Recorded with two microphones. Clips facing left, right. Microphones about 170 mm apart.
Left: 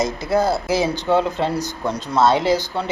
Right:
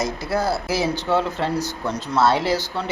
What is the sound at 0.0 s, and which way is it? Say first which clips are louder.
Speech: left 4 dB; 20° left (ahead or behind).